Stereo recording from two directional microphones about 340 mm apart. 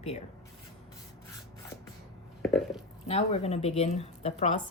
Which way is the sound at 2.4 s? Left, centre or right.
Centre.